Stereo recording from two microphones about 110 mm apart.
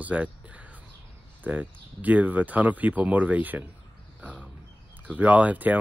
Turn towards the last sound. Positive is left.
turn(degrees=-15)  # may be behind; listen again after turning